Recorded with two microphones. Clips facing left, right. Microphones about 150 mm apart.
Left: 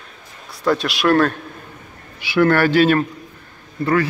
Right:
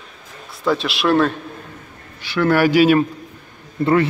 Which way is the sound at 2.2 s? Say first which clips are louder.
Left 4 dB; 10° left (ahead or behind).